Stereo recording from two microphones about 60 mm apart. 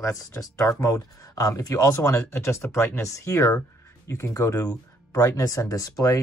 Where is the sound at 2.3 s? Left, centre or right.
Left.